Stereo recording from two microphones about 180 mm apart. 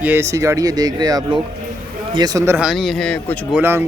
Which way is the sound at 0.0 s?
15° right (ahead or behind).